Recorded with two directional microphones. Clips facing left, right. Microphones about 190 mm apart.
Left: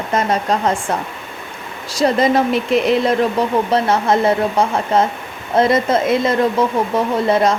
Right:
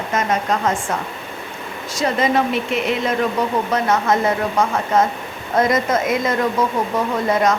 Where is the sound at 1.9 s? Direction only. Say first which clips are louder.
Left 4 dB; 35° left (ahead or behind).